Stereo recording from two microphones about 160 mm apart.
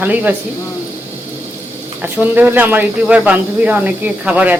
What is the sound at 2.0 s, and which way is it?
Speech, 10° right (ahead or behind).